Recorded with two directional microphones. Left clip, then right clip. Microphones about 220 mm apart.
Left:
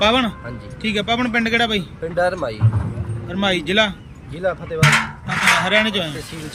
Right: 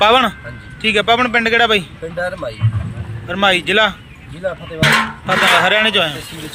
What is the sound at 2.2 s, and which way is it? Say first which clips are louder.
Speech: left 2 dB; 30° left (ahead or behind).